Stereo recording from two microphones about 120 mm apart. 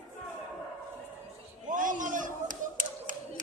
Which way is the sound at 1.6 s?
90° right.